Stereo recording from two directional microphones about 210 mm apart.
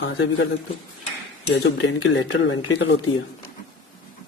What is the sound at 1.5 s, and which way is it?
Speech, 60° left (ahead or behind).